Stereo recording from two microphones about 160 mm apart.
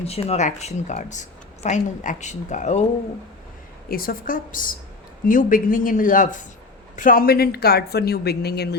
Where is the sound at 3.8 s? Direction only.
65° left (ahead or behind); by 8.7 s 90° left.